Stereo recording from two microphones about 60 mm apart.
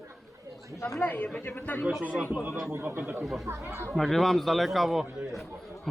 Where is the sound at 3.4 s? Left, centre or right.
Right.